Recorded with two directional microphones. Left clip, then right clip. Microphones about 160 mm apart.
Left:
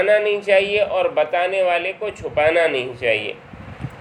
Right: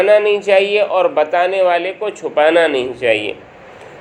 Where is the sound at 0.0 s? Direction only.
25° right (ahead or behind).